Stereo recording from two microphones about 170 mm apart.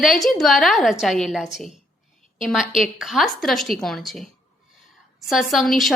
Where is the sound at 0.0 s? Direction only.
Centre (ahead or behind).